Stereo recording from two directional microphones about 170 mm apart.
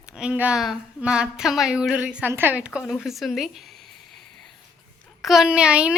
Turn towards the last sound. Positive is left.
turn(degrees=-5)  # may be behind; listen again after turning